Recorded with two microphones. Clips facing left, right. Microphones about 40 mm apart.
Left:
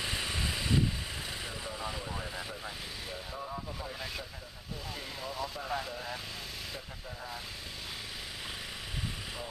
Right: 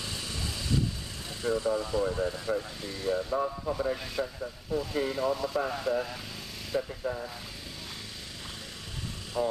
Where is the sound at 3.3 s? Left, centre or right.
Right.